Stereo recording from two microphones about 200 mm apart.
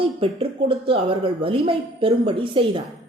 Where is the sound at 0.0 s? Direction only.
25° right (ahead or behind).